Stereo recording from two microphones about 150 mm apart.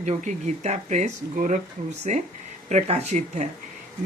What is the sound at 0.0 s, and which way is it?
Speech, 55° right (ahead or behind).